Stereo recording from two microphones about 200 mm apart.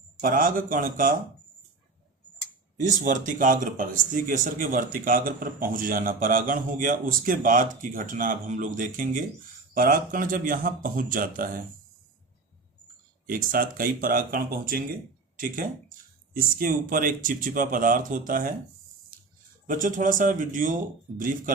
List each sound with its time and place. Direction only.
0.2 s speech: 45° right (ahead or behind)
2.8 s speech: 40° right (ahead or behind)
13.2 s speech: 45° right (ahead or behind)
16.3 s speech: 45° right (ahead or behind)
19.6 s speech: 45° right (ahead or behind)